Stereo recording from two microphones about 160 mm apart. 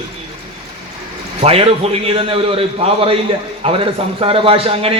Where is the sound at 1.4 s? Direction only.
40° right (ahead or behind).